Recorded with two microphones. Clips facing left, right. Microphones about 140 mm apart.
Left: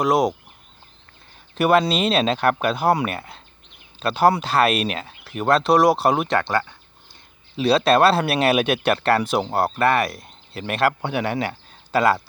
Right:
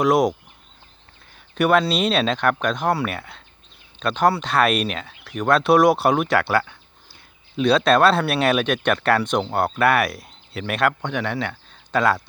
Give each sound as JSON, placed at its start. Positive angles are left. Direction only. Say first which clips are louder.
{"t": 0.0, "sound": "speech", "louder": "right 1 dB", "side_deg": 0}
{"t": 1.5, "sound": "speech", "louder": "left 1 dB", "side_deg": 0}
{"t": 4.0, "sound": "speech", "louder": "left 2 dB", "side_deg": 5}
{"t": 7.5, "sound": "speech", "louder": "even", "side_deg": 5}